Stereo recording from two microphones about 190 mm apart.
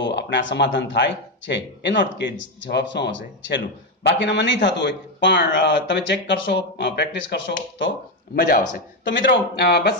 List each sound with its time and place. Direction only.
0.0 s speech: 70° left (ahead or behind)
8.4 s speech: 55° left (ahead or behind)
9.1 s speech: 70° left (ahead or behind)